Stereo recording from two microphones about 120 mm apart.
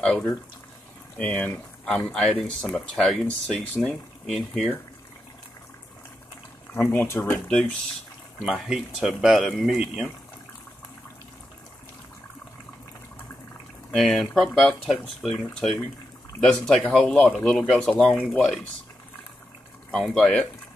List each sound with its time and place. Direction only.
0.0 s speech: 10° left (ahead or behind)
6.7 s speech: 20° left (ahead or behind)
8.5 s speech: centre (ahead or behind)
13.9 s speech: centre (ahead or behind)
19.9 s speech: 5° left (ahead or behind)